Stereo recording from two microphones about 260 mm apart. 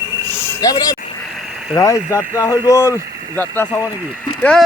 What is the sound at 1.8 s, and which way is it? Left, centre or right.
Speech, centre.